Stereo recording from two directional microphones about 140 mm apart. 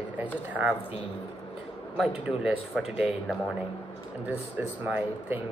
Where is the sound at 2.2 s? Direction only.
5° right (ahead or behind).